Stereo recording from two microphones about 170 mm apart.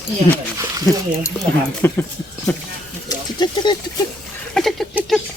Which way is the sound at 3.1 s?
25° left (ahead or behind).